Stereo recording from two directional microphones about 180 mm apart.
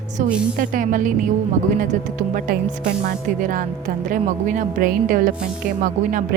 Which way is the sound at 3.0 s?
50° right (ahead or behind).